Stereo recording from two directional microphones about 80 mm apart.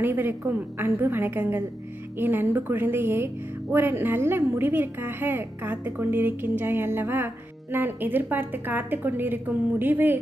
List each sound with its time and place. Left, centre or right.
0.0 s a woman's voice: right